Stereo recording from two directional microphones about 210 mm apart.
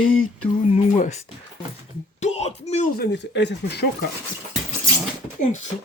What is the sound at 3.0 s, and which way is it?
Speech, 55° left (ahead or behind).